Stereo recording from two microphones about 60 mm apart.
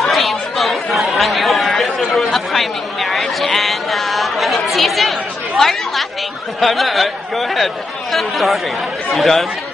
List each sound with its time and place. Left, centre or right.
0.0 s chatter: centre
5.6 s speech: centre